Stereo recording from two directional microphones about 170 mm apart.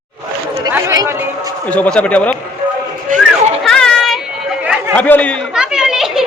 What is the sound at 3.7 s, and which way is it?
Children playing, 5° left (ahead or behind).